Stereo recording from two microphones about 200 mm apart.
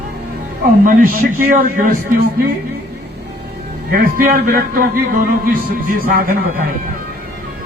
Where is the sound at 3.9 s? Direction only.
45° right (ahead or behind).